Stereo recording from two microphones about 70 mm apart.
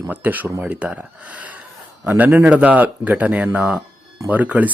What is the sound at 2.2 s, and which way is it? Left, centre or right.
Speech, right.